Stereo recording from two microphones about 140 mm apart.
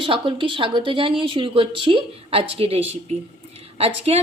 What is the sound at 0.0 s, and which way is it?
A woman's voice, 35° right (ahead or behind).